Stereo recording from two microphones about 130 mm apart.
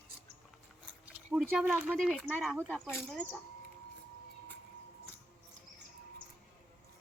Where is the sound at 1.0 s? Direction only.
10° right (ahead or behind).